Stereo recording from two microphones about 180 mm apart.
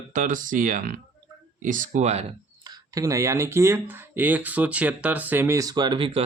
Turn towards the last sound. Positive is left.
turn(degrees=-30)  # may be behind; listen again after turning